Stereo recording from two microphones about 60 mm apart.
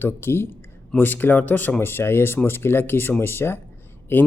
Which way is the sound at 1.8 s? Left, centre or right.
Left.